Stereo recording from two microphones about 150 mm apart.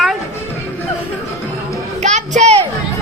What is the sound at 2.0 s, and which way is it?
Music, 50° right (ahead or behind).